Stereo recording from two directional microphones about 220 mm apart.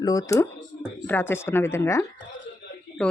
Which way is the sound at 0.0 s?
15° left (ahead or behind).